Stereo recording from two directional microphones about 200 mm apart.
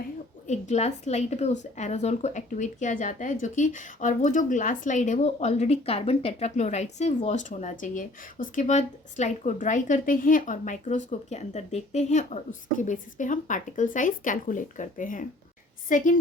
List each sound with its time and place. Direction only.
0.4 s a woman's voice: 35° left (ahead or behind)